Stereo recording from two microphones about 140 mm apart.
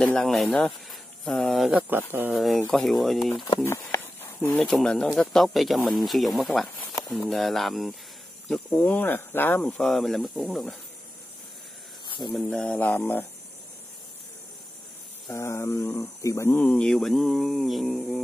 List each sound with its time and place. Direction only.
0.0 s speech: centre (ahead or behind)
1.9 s speech: 15° right (ahead or behind)
2.3 s speech: centre (ahead or behind)
3.5 s a sound: 20° left (ahead or behind)
4.6 s speech: 5° left (ahead or behind)
12.4 s speech: 10° left (ahead or behind)
15.3 s speech: 20° left (ahead or behind); by 18.2 s centre (ahead or behind)